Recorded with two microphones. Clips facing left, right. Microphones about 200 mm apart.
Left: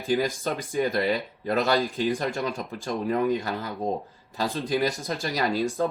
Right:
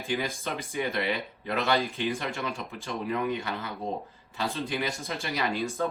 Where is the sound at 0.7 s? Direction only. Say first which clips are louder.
Left 5 dB; 35° left (ahead or behind).